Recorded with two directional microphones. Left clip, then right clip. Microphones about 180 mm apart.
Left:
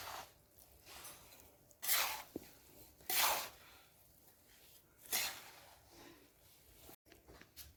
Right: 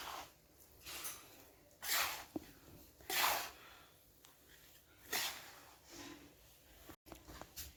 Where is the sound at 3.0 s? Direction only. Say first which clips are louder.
Even; 40° left (ahead or behind).